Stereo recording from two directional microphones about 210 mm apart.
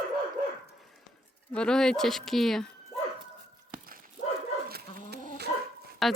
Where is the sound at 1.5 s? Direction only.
5° left (ahead or behind).